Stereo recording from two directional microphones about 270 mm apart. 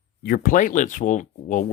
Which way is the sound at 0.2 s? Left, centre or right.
Left.